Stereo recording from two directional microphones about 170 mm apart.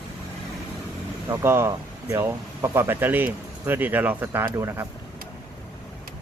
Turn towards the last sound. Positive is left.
turn(degrees=-15)  # may be behind; listen again after turning